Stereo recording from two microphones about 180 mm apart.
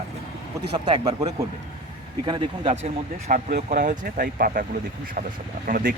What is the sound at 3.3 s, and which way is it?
Speech, 55° right (ahead or behind).